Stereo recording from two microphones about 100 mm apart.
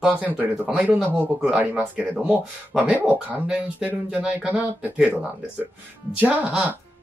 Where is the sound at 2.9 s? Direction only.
15° right (ahead or behind).